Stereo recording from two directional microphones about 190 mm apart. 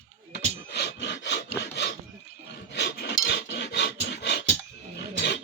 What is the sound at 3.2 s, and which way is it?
Dog, 65° left (ahead or behind).